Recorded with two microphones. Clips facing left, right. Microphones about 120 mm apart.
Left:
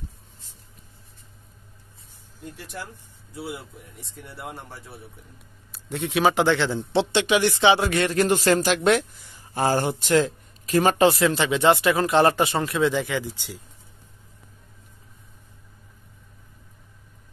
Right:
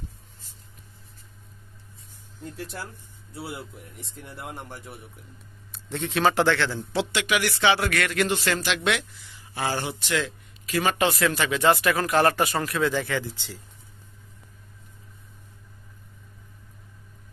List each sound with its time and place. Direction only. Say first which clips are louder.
5.7 s a man's voice: left 2 dB; 10° left (ahead or behind); by 11.1 s 40° left (ahead or behind)
11.1 s speech: left 4 dB; 25° left (ahead or behind)